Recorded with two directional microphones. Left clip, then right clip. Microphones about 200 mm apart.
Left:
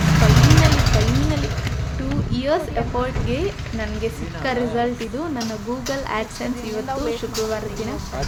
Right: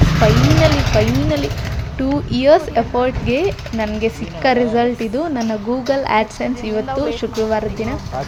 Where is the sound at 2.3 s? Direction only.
30° right (ahead or behind).